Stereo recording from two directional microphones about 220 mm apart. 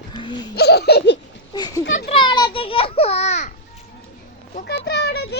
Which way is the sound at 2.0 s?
20° left (ahead or behind).